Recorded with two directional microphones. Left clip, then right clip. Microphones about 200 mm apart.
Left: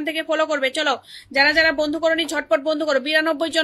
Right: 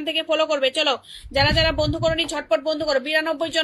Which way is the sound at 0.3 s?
25° left (ahead or behind).